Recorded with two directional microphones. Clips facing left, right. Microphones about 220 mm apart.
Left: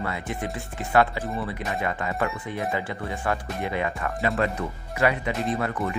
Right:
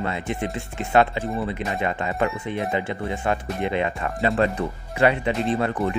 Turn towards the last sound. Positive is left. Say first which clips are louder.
# right 4 dB
turn(degrees=-30)  # may be behind; listen again after turning